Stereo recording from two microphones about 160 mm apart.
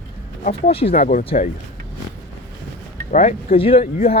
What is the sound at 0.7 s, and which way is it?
Speech, 35° left (ahead or behind).